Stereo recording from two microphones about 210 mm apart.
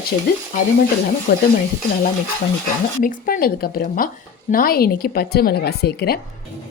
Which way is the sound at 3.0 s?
40° left (ahead or behind).